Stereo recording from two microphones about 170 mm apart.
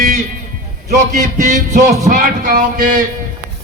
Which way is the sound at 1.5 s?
45° right (ahead or behind).